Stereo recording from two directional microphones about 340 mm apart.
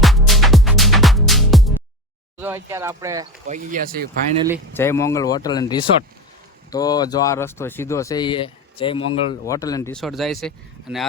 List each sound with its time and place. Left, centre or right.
0.0 s music: centre
2.4 s speech: centre
3.4 s speech: right
4.4 s speech: centre
4.7 s speech: centre